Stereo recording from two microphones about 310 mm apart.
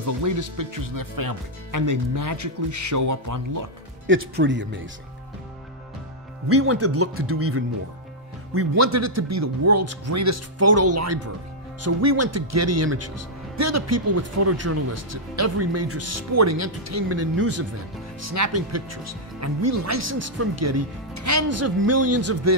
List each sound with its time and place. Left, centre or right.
0.0 s speech: right
4.1 s speech: right
6.5 s speech: right
8.5 s speech: right
18.2 s speech: right